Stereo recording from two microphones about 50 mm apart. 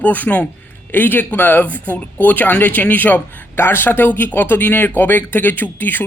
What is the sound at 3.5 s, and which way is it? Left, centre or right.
Speech, left.